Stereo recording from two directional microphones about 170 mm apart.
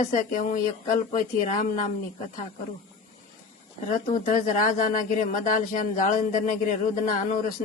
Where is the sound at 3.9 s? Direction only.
50° left (ahead or behind).